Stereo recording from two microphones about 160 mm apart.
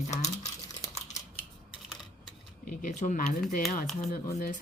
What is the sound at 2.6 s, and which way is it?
Speech, 60° left (ahead or behind).